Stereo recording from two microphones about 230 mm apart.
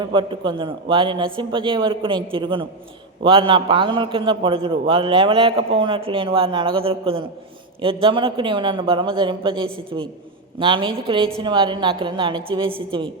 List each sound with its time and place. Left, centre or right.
0.1 s a man's voice: right